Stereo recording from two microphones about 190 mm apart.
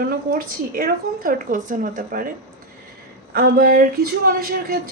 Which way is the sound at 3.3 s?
50° right (ahead or behind).